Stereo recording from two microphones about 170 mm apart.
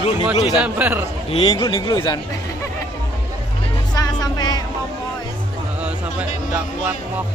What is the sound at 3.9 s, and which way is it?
Music, 25° left (ahead or behind).